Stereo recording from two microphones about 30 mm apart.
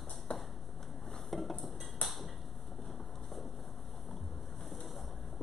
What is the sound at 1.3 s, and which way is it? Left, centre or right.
Dishes, centre.